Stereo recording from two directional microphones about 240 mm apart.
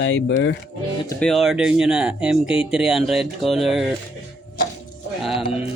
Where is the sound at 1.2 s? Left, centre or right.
Centre.